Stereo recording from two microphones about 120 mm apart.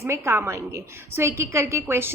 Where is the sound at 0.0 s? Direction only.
20° right (ahead or behind).